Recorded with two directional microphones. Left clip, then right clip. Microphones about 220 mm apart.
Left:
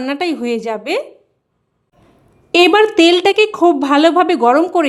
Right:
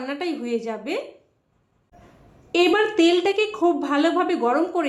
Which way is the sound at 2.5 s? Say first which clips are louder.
Left 9 dB; 50° left (ahead or behind).